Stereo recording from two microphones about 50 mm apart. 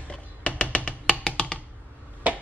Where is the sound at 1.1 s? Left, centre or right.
Centre.